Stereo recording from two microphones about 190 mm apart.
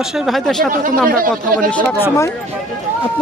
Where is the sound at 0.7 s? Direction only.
45° right (ahead or behind).